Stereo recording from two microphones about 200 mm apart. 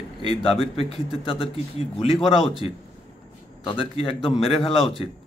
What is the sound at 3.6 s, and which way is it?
A man's voice, 25° left (ahead or behind).